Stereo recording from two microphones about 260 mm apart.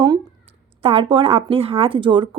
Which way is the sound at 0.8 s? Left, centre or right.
Centre.